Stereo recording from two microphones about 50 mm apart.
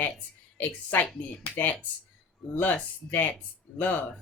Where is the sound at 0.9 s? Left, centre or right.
Left.